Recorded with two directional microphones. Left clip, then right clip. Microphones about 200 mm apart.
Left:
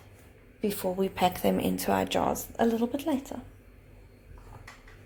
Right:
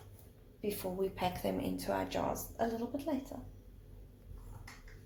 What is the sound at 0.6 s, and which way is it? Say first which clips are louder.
Speech: left 7 dB; 50° left (ahead or behind).